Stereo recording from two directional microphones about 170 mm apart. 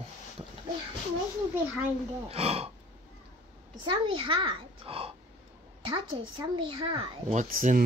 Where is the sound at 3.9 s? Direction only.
30° right (ahead or behind).